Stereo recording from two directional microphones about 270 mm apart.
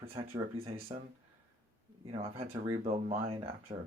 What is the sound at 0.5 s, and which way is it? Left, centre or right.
Speech, right.